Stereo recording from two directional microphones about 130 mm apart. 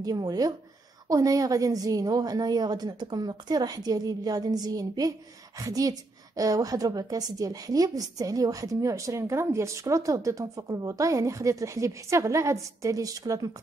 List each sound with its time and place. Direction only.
0.0 s a woman's voice: 30° right (ahead or behind)